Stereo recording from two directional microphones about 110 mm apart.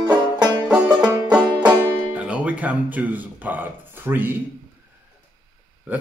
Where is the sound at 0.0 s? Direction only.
40° right (ahead or behind).